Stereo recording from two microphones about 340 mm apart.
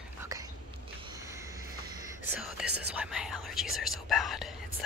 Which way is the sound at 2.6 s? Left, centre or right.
Right.